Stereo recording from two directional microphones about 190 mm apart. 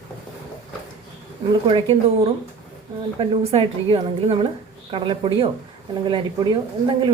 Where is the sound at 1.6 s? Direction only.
25° right (ahead or behind).